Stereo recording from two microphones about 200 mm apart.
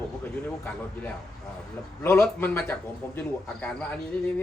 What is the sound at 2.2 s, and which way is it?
A man's voice, 10° left (ahead or behind).